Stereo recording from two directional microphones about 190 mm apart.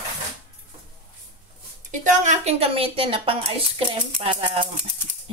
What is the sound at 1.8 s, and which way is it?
A woman's voice, 40° right (ahead or behind).